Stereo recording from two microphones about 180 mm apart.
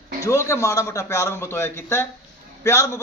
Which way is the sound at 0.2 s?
15° left (ahead or behind).